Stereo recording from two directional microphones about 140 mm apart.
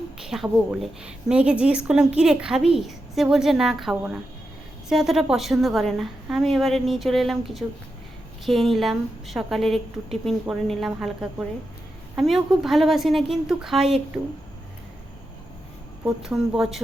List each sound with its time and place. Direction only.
0.2 s a woman's voice: 5° right (ahead or behind)
16.0 s a woman's voice: 5° right (ahead or behind)